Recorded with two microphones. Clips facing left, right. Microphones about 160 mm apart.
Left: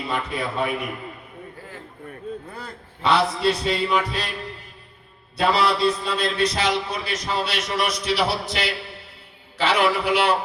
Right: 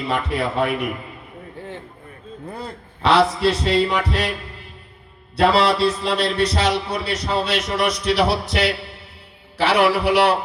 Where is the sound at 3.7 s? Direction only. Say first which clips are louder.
Right 3 dB; 65° right (ahead or behind).